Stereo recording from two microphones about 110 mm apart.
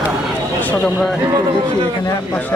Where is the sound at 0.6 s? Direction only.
5° left (ahead or behind).